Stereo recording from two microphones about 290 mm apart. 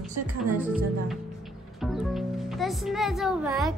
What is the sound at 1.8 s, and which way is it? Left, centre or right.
Speech, centre.